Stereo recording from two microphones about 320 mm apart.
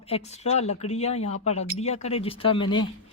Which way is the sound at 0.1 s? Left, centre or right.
Centre.